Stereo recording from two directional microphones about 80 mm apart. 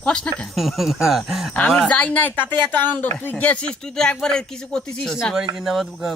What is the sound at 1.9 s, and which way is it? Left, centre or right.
Speech, centre.